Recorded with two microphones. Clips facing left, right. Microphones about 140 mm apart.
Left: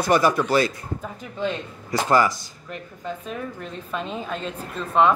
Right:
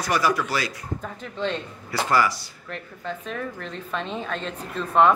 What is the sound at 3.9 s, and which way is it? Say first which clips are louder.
Speech: even; 5° left (ahead or behind).